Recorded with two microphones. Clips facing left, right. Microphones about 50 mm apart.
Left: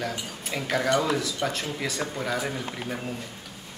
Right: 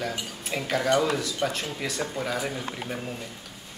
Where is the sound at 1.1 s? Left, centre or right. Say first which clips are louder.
Even; centre.